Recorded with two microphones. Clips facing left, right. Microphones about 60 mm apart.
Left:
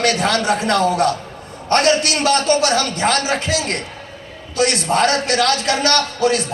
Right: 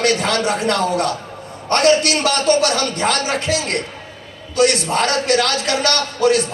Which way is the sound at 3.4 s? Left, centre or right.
Right.